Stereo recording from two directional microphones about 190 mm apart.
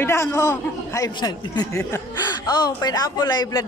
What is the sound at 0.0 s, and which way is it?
A man's voice, 15° left (ahead or behind).